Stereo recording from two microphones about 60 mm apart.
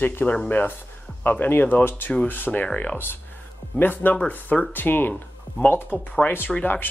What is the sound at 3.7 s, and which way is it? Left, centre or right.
Speech, left.